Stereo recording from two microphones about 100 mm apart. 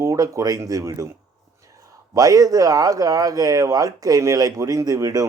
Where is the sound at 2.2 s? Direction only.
35° right (ahead or behind).